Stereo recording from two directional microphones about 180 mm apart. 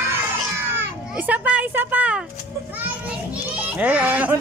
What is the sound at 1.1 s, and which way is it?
Speech, 10° right (ahead or behind).